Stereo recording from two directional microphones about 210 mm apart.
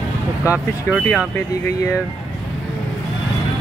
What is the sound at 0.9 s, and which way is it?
Speech, 5° left (ahead or behind).